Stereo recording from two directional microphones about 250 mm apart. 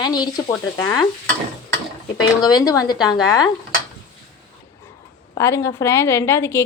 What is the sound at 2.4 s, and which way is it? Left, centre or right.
A woman's voice, centre.